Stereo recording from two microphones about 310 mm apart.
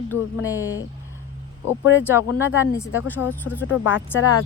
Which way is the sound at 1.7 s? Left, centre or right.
Centre.